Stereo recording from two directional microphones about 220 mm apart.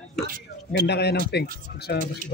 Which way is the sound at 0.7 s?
50° left (ahead or behind).